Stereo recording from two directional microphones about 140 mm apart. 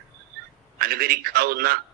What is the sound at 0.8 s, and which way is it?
Speech, 90° right.